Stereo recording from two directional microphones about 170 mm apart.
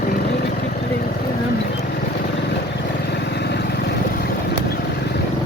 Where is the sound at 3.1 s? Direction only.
80° left.